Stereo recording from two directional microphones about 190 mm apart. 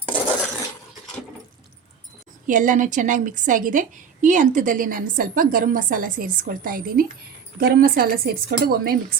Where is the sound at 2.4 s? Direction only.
45° right (ahead or behind).